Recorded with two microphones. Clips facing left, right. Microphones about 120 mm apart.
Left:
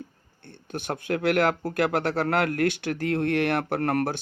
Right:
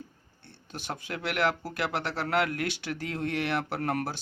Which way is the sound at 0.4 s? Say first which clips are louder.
Left 6 dB; 55° left (ahead or behind).